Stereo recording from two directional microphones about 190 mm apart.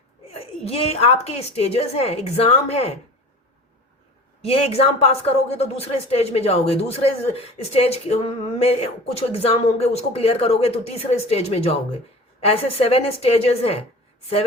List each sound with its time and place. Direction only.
0.3 s speech: 35° left (ahead or behind)
4.4 s speech: 30° left (ahead or behind)